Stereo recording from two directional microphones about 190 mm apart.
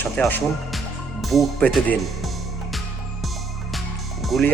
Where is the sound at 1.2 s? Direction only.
Centre (ahead or behind).